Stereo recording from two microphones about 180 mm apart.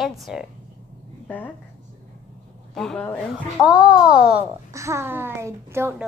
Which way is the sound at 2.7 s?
5° left (ahead or behind).